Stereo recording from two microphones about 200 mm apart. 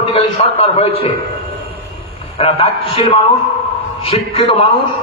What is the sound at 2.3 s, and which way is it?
A man's voice, 30° left (ahead or behind).